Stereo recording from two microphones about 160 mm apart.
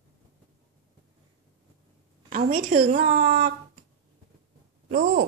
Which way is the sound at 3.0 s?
85° right.